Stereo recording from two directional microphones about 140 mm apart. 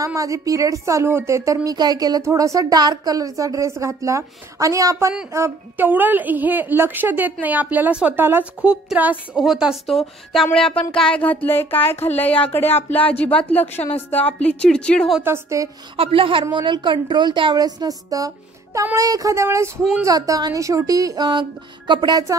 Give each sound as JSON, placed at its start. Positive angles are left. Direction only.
{"t": 0.0, "sound": "a woman's voice", "side_deg": -25}
{"t": 13.7, "sound": "a woman's voice", "side_deg": 45}
{"t": 14.1, "sound": "speech", "side_deg": 10}
{"t": 15.2, "sound": "a woman's voice", "side_deg": -20}
{"t": 16.0, "sound": "a woman's voice", "side_deg": -40}